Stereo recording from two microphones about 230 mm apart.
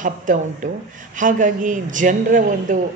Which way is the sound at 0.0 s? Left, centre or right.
Right.